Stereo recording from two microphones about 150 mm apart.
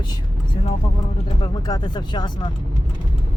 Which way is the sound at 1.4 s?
30° left (ahead or behind).